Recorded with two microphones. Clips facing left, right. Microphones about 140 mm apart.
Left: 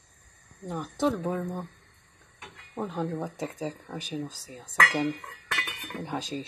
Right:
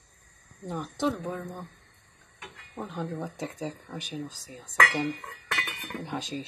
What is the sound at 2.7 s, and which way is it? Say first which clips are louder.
Speech: left 4 dB; 30° left (ahead or behind).